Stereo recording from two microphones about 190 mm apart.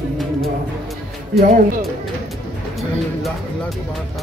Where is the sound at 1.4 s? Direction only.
50° right (ahead or behind).